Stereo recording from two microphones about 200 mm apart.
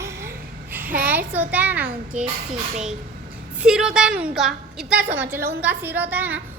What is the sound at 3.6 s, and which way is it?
A woman's voice, 5° right (ahead or behind).